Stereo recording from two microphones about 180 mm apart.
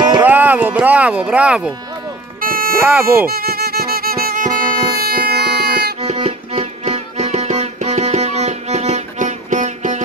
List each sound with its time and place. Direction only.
0.2 s speech: 10° right (ahead or behind)
2.4 s music: 50° right (ahead or behind)
2.8 s speech: 10° right (ahead or behind)
3.3 s music: 60° right (ahead or behind)
5.9 s music: 35° right (ahead or behind)